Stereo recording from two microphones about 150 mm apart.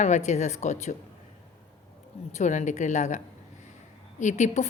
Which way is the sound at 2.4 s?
50° left (ahead or behind).